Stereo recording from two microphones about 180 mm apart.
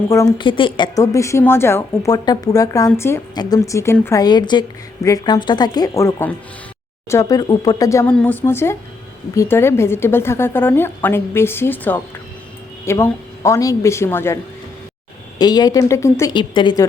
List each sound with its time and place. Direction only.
0.1 s a woman's voice: 20° left (ahead or behind)
15.4 s a woman's voice: 20° left (ahead or behind)
16.3 s a woman's voice: 25° left (ahead or behind)